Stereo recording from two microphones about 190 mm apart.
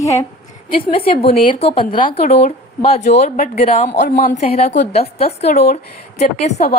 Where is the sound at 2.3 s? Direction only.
35° left (ahead or behind).